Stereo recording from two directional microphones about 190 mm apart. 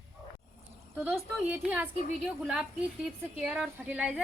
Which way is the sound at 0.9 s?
10° right (ahead or behind).